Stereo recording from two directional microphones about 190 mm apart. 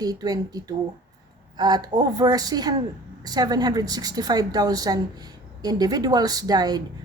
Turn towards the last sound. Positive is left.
turn(degrees=-20)  # may be behind; listen again after turning